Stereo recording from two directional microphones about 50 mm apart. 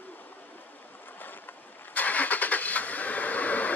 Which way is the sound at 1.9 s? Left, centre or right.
Left.